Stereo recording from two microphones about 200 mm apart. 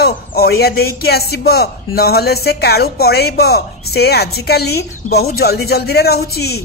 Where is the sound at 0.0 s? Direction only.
50° left (ahead or behind).